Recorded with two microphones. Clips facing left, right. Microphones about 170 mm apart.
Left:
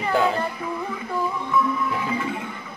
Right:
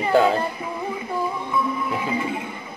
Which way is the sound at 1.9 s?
20° right (ahead or behind).